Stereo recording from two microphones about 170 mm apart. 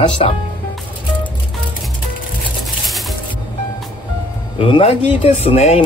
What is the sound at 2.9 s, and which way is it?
Music, centre (ahead or behind).